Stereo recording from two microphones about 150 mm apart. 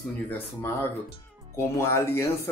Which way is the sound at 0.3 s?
15° left (ahead or behind).